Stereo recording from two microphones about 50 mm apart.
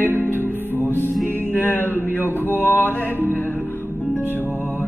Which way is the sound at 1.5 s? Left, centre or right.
Left.